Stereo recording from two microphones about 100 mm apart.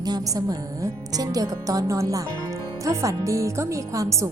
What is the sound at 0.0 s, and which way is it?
A woman's voice, 40° right (ahead or behind).